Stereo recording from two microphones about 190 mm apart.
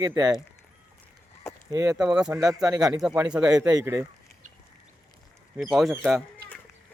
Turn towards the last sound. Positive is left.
turn(degrees=0)  # may be behind; listen again after turning